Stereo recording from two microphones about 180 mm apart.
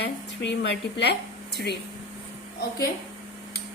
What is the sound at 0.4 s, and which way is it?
Speech, 70° left (ahead or behind).